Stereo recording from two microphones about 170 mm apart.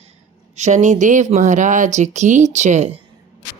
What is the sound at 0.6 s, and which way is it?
Speech, 45° right (ahead or behind).